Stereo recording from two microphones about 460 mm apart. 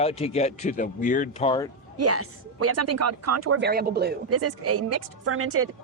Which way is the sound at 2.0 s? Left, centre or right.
Right.